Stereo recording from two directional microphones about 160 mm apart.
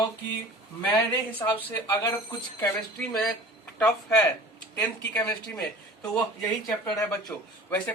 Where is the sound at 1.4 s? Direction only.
20° left (ahead or behind).